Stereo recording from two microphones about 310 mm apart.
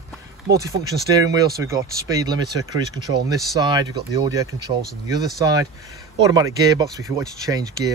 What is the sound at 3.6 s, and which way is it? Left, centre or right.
Speech, centre.